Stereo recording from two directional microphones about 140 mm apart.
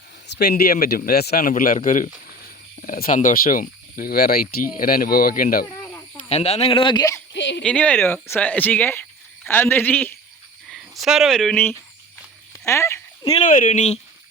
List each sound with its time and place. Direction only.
0.5 s speech: 90° left
6.2 s speech: 50° left (ahead or behind); by 7.2 s 30° left (ahead or behind)
7.6 s speech: 10° left (ahead or behind)
10.7 s speech: centre (ahead or behind)
12.5 s a sound: 20° left (ahead or behind)
13.4 s speech: 70° left (ahead or behind)